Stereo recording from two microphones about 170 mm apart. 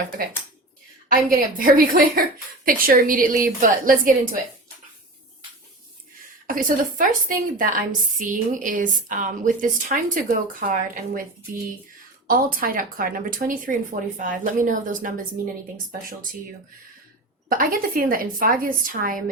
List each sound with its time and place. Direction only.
1.0 s a woman's voice: 55° right (ahead or behind)
6.5 s a woman's voice: 55° right (ahead or behind)
12.3 s a woman's voice: 55° right (ahead or behind)
17.5 s a woman's voice: 55° right (ahead or behind)